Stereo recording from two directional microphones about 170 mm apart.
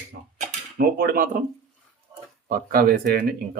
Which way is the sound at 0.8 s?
60° right (ahead or behind).